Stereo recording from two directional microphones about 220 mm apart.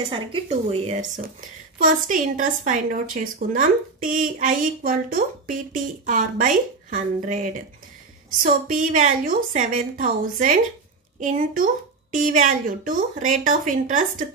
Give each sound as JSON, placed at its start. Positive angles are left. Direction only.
{"t": 0.3, "sound": "speech", "side_deg": -25}
{"t": 1.8, "sound": "a woman's voice", "side_deg": -35}